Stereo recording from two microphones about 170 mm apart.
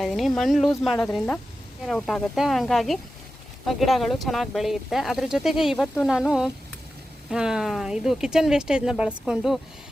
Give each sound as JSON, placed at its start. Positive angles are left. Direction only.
{"t": 0.0, "sound": "speech", "side_deg": 0}